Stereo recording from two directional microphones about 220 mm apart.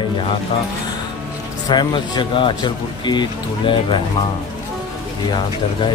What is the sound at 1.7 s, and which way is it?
Speech, 20° left (ahead or behind).